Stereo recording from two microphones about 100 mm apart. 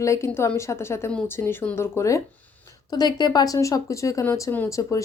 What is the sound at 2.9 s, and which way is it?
Speech, 45° left (ahead or behind).